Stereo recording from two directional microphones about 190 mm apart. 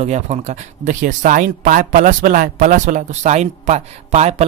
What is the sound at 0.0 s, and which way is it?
Speech, 35° right (ahead or behind).